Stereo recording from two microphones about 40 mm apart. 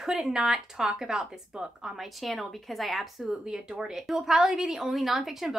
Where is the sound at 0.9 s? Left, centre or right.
Right.